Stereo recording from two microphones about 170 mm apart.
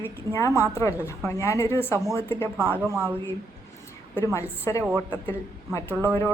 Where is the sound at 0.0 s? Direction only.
20° left (ahead or behind).